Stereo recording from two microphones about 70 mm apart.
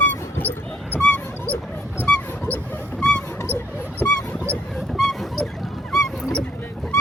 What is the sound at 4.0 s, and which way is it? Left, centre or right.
Dog, centre.